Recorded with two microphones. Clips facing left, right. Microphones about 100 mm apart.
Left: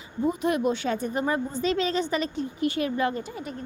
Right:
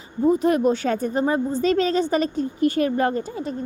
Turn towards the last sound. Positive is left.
turn(degrees=-45)  # may be behind; listen again after turning